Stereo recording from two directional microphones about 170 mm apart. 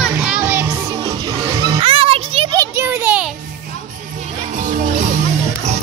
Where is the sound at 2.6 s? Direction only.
15° right (ahead or behind).